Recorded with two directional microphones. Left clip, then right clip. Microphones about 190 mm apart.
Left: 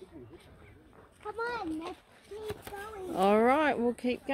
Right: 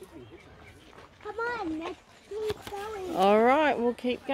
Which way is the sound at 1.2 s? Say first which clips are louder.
Right 3 dB; 50° left (ahead or behind).